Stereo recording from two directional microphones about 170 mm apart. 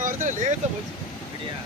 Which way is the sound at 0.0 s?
50° right (ahead or behind).